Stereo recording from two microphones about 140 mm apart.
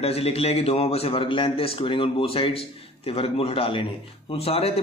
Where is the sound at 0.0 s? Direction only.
45° left (ahead or behind).